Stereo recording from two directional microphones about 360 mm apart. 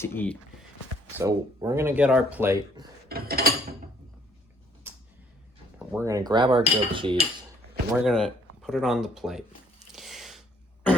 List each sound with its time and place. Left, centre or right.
0.0 s speech: centre
1.2 s speech: centre
3.1 s a sound: right
5.9 s speech: centre
7.9 s speech: centre
9.9 s a sound: centre